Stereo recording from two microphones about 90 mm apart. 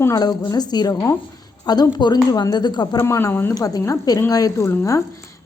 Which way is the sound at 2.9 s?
30° left (ahead or behind).